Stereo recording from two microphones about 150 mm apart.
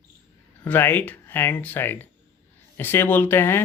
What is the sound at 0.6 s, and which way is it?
Speech, 15° left (ahead or behind).